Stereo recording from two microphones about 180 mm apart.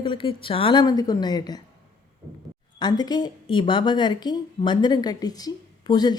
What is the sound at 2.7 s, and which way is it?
Speech, 25° left (ahead or behind).